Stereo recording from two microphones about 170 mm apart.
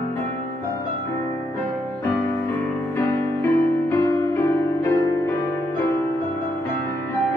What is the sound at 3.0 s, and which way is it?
Music, 15° left (ahead or behind).